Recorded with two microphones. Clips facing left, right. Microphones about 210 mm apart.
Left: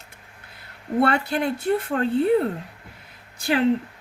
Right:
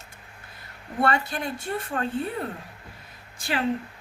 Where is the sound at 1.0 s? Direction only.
65° left (ahead or behind).